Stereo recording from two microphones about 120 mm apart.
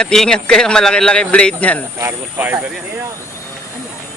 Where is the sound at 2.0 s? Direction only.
20° right (ahead or behind).